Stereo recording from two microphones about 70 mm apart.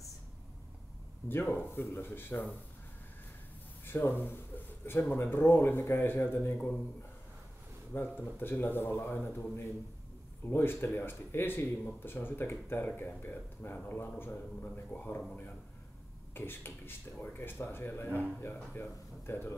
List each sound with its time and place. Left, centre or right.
1.3 s speech: left
3.8 s speech: left
7.9 s speech: left
16.3 s speech: left